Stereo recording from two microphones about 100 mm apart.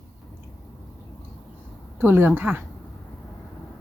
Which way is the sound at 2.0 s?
20° right (ahead or behind).